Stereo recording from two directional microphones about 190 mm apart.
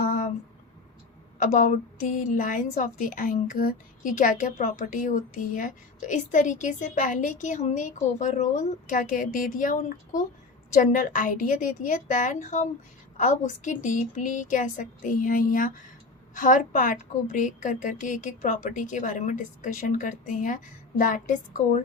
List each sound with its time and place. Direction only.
1.4 s a woman's voice: 45° left (ahead or behind)